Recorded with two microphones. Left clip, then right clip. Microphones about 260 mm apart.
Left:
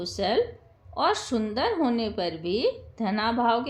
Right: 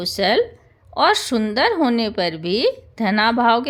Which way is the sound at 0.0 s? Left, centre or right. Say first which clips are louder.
Right 7 dB; right.